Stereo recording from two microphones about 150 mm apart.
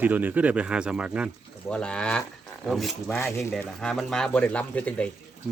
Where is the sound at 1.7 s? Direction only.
5° left (ahead or behind).